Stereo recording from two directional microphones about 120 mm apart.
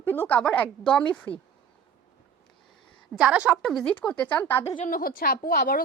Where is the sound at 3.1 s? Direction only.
10° right (ahead or behind).